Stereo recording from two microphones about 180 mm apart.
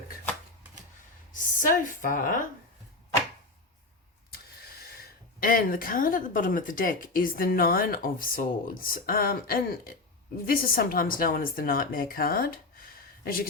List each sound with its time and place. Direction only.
1.3 s a woman's voice: 45° left (ahead or behind)
4.9 s speech: 50° left (ahead or behind)